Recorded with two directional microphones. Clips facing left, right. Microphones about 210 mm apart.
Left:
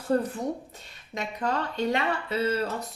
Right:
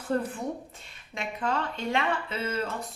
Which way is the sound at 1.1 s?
40° left (ahead or behind).